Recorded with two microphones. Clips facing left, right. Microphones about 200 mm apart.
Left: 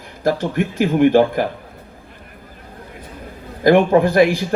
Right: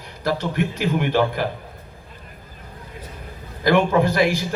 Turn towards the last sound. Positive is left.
turn(degrees=55)  # may be behind; listen again after turning